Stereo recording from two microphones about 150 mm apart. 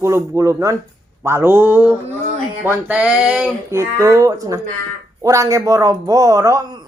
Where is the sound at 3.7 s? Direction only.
20° right (ahead or behind).